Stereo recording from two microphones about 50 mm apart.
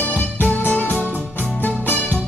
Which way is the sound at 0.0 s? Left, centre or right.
Left.